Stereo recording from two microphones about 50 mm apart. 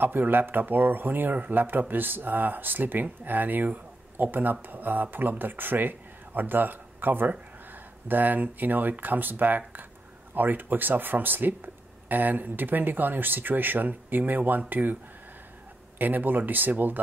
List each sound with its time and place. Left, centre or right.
0.0 s a man's voice: right
16.0 s a man's voice: right